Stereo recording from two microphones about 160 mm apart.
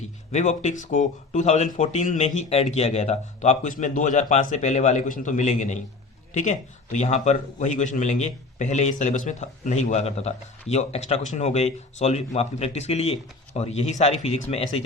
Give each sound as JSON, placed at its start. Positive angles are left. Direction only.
{"t": 0.3, "sound": "a man's voice", "side_deg": 45}